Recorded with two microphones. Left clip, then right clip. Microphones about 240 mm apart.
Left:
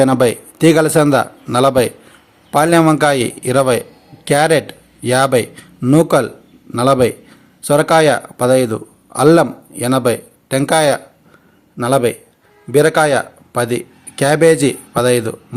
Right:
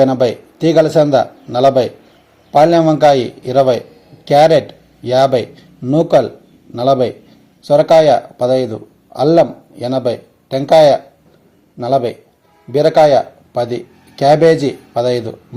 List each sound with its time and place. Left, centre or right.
0.0 s a man's voice: left